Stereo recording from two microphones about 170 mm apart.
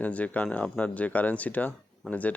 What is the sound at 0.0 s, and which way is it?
Speech, 10° left (ahead or behind).